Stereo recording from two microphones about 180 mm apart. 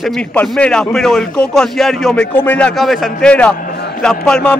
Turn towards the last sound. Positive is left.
turn(degrees=5)  # may be behind; listen again after turning